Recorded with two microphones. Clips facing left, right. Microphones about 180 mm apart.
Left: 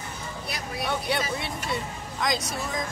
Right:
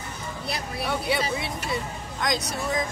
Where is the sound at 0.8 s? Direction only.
Centre (ahead or behind).